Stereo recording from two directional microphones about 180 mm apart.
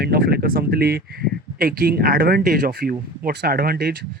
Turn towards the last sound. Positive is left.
turn(degrees=-60)  # may be behind; listen again after turning